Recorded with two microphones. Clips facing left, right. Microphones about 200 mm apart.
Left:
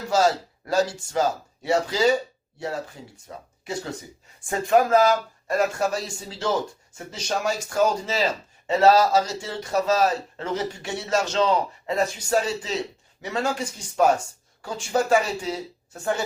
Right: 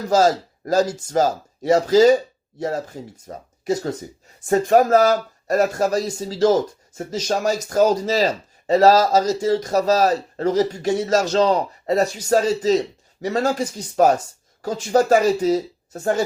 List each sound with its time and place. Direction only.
0.1 s speech: 40° right (ahead or behind)